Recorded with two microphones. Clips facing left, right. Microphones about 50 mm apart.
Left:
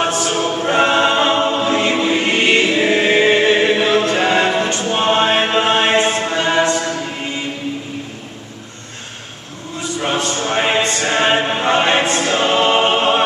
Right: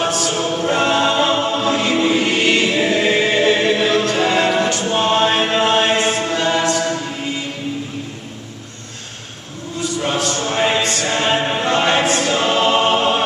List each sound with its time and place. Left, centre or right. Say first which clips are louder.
0.3 s choir: left 1 dB; centre
10.1 s a sound: left 3 dB; centre
10.8 s music: left 2 dB; centre
11.4 s chant: left 1 dB; centre
12.0 s choir: left 1 dB; centre